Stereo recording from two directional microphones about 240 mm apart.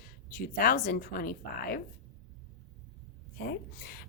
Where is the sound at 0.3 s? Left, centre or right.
Left.